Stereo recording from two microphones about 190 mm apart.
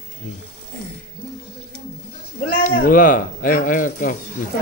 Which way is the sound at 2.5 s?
50° left (ahead or behind).